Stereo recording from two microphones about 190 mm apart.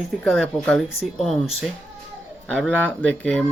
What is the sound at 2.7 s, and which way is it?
Speech, 10° right (ahead or behind).